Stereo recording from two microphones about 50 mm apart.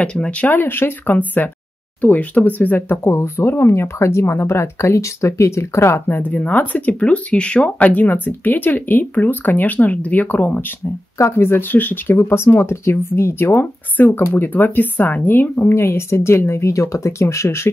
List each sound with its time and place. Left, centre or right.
0.0 s speech: left
0.5 s speech: left
1.1 s speech: left
3.1 s speech: left
6.0 s speech: left
7.0 s speech: left
11.1 s speech: left
12.1 s speech: left
15.7 s speech: left